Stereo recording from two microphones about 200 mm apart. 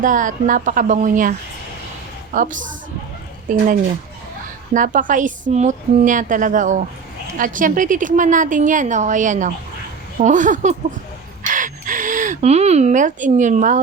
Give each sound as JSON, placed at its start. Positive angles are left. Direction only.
{"t": 0.0, "sound": "a woman's voice", "side_deg": -40}
{"t": 4.7, "sound": "a woman's voice", "side_deg": -40}